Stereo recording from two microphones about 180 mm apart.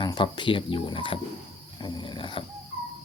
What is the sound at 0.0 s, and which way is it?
Speech, 25° left (ahead or behind).